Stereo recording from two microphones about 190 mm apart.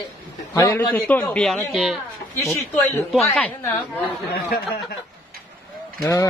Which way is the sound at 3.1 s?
5° left (ahead or behind).